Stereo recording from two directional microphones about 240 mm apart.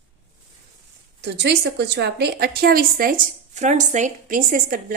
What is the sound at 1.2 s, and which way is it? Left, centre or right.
A woman's voice, right.